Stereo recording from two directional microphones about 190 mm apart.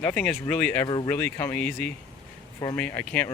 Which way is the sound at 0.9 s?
25° left (ahead or behind).